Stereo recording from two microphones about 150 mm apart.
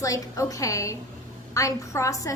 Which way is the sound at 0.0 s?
20° left (ahead or behind).